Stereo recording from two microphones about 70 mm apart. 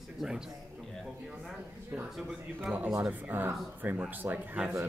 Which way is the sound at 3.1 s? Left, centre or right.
Right.